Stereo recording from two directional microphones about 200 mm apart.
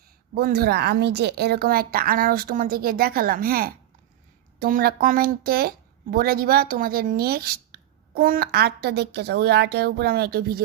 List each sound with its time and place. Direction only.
0.3 s speech: 50° right (ahead or behind)